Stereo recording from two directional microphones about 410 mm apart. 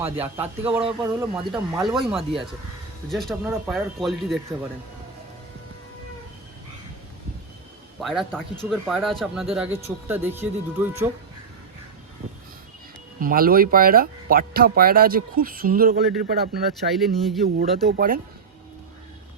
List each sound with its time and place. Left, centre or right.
0.0 s speech: centre
8.0 s speech: centre
13.1 s speech: right
16.7 s speech: centre
17.6 s speech: right